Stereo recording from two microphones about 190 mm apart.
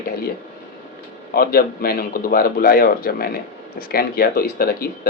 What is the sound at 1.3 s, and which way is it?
Speech, 50° left (ahead or behind).